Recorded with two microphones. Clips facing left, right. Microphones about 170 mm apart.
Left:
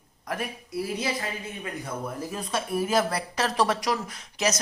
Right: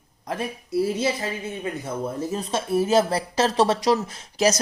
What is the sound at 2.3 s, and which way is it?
Speech, 25° right (ahead or behind).